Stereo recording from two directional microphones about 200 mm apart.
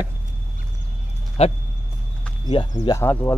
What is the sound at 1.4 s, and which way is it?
Speech, 30° left (ahead or behind).